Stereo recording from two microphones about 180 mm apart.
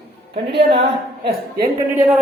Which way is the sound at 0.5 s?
30° right (ahead or behind).